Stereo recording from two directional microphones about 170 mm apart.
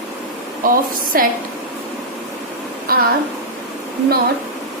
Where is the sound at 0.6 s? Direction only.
55° right (ahead or behind).